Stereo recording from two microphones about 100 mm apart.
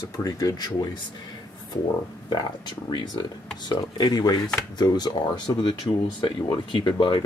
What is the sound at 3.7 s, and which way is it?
Speech, 45° left (ahead or behind).